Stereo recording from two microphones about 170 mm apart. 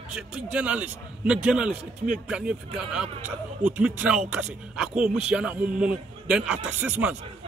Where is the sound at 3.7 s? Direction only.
10° right (ahead or behind).